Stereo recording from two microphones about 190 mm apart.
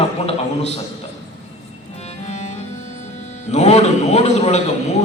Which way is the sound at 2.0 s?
35° left (ahead or behind).